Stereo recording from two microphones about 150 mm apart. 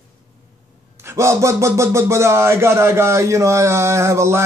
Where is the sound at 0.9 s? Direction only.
20° right (ahead or behind).